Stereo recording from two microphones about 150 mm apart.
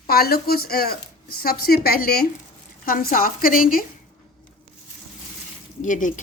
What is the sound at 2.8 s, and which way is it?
Speech, 75° left (ahead or behind).